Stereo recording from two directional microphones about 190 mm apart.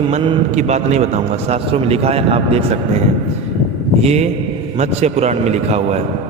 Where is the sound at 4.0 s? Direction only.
35° right (ahead or behind).